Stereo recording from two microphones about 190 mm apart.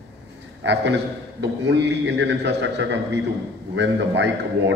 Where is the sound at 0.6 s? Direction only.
65° right (ahead or behind).